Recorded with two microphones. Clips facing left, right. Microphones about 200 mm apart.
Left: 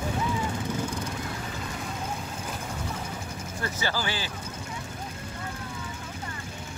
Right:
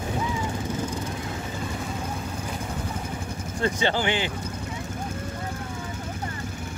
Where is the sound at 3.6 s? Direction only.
25° right (ahead or behind).